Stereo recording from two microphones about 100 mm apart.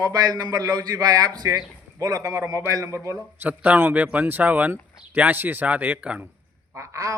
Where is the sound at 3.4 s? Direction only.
15° right (ahead or behind).